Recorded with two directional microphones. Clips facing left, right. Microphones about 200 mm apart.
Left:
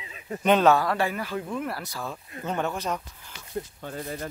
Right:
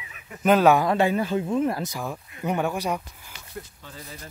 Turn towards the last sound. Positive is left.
turn(degrees=55)  # may be behind; listen again after turning